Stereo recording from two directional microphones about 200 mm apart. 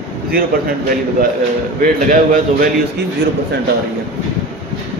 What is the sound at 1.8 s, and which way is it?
Speech, 40° right (ahead or behind).